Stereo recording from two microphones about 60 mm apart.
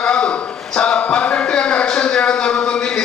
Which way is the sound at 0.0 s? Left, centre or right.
Centre.